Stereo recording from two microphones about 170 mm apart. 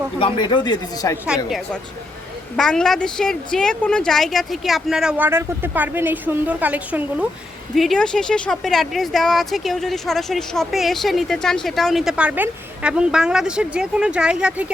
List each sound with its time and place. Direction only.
0.2 s speech: 30° left (ahead or behind)
1.5 s speech: centre (ahead or behind)
7.8 s speech: 5° left (ahead or behind)